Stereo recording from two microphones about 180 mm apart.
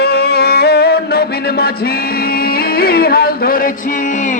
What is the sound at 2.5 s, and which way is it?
Music, 60° left (ahead or behind).